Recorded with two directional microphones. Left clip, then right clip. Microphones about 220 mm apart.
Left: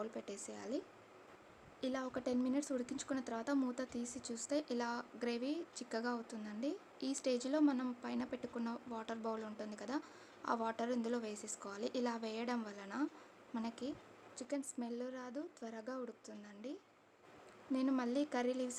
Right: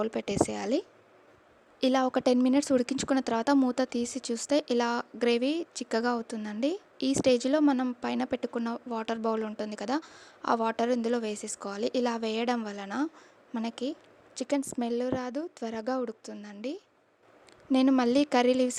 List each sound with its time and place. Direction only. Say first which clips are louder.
0.0 s speech: right 17 dB; 40° right (ahead or behind)